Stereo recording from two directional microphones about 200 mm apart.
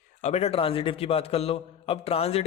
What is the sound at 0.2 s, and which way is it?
A man's voice, 35° left (ahead or behind).